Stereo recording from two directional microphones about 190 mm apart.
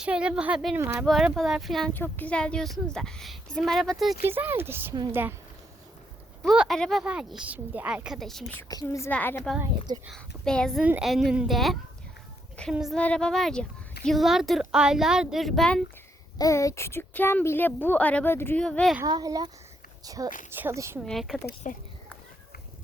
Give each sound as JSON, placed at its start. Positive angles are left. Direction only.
{"t": 0.0, "sound": "speech", "side_deg": -5}
{"t": 4.3, "sound": "speech", "side_deg": -10}
{"t": 6.4, "sound": "speech", "side_deg": 0}
{"t": 8.7, "sound": "speech", "side_deg": 20}
{"t": 9.6, "sound": "speech", "side_deg": -20}
{"t": 10.1, "sound": "speech", "side_deg": 5}
{"t": 16.4, "sound": "speech", "side_deg": 15}
{"t": 19.0, "sound": "speech", "side_deg": -20}
{"t": 21.1, "sound": "speech", "side_deg": 0}
{"t": 21.7, "sound": "speech", "side_deg": 40}